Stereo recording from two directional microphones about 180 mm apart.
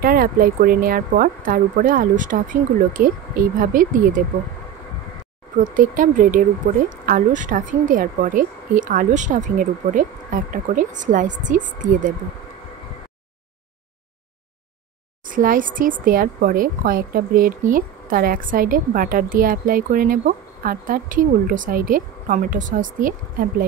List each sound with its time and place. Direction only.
0.0 s speech: 55° right (ahead or behind)
5.6 s speech: 50° right (ahead or behind)
15.2 s speech: 50° right (ahead or behind)